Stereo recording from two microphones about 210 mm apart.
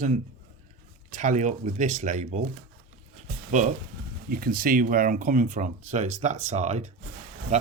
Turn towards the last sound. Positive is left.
turn(degrees=-35)  # may be behind; listen again after turning